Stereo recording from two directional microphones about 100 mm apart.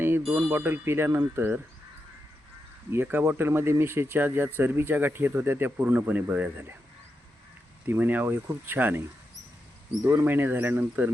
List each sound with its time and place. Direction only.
0.3 s speech: 20° right (ahead or behind)
2.9 s speech: 20° right (ahead or behind)
7.9 s speech: 20° right (ahead or behind)